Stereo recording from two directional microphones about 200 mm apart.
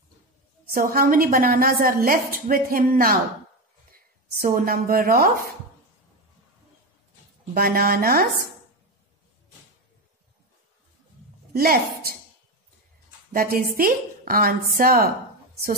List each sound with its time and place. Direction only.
0.7 s a woman's voice: 45° right (ahead or behind)
7.5 s a woman's voice: 50° right (ahead or behind)
11.5 s a woman's voice: 50° right (ahead or behind)
13.3 s a woman's voice: 45° right (ahead or behind)